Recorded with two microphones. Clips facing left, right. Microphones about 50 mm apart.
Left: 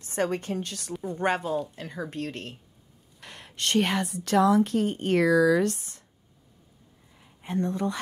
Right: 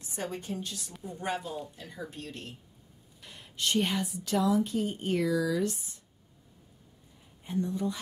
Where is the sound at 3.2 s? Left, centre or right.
Left.